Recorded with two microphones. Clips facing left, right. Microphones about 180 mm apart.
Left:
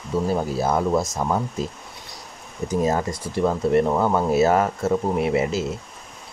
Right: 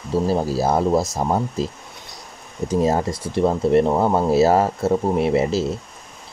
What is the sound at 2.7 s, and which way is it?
Speech, 30° right (ahead or behind).